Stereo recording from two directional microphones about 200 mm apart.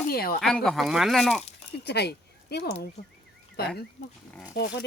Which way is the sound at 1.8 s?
55° left (ahead or behind).